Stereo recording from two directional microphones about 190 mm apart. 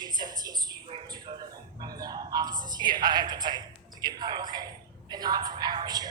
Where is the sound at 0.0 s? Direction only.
20° right (ahead or behind).